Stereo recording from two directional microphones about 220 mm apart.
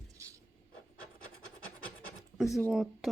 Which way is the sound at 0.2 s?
15° right (ahead or behind).